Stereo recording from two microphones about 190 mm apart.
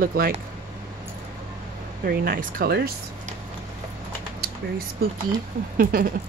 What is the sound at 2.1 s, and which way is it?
Speech, 50° right (ahead or behind).